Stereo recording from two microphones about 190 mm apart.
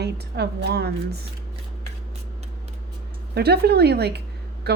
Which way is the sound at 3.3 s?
60° right (ahead or behind).